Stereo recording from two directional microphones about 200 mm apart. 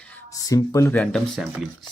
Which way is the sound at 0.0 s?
15° left (ahead or behind).